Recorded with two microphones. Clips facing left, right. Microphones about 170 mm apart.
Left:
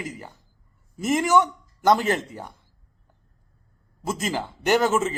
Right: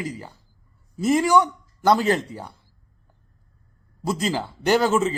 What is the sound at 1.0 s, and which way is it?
Speech, 20° left (ahead or behind).